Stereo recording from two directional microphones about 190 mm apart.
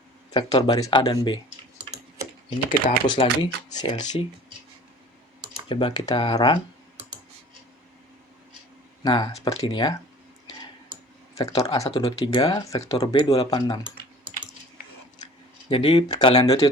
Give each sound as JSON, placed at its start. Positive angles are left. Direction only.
{"t": 0.3, "sound": "speech", "side_deg": 20}
{"t": 2.6, "sound": "speech", "side_deg": 25}
{"t": 5.6, "sound": "speech", "side_deg": 25}
{"t": 9.0, "sound": "speech", "side_deg": 20}
{"t": 11.3, "sound": "speech", "side_deg": 15}
{"t": 15.7, "sound": "speech", "side_deg": 25}